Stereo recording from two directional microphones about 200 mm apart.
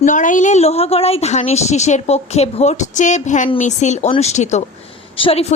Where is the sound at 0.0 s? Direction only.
40° left (ahead or behind).